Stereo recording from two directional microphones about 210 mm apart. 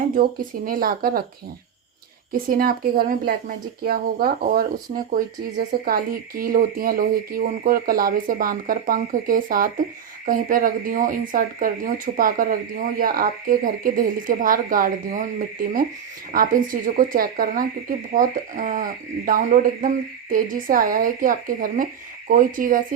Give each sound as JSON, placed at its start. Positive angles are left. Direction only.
{"t": 0.1, "sound": "speech", "side_deg": -45}
{"t": 2.3, "sound": "speech", "side_deg": -45}